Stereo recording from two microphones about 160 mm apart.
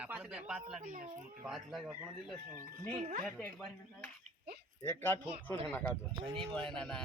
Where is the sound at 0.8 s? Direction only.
55° right (ahead or behind).